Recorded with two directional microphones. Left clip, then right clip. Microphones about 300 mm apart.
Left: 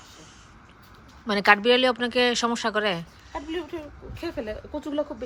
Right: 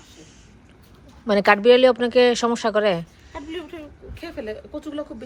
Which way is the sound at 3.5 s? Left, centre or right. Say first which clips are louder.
Left 1 dB; left.